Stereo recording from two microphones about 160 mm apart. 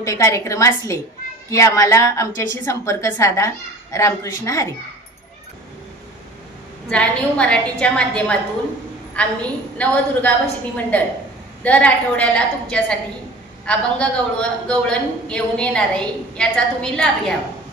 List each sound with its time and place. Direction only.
0.0 s a woman's voice: 20° left (ahead or behind)
6.9 s a man's voice: 5° left (ahead or behind)